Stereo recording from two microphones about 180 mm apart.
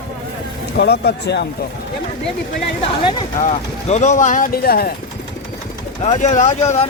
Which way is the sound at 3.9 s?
40° left (ahead or behind).